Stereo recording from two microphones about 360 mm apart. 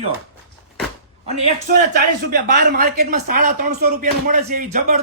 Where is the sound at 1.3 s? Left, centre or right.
Centre.